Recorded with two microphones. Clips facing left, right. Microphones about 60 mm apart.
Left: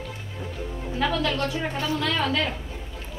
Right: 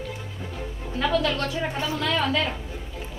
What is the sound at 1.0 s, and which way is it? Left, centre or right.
Speech, centre.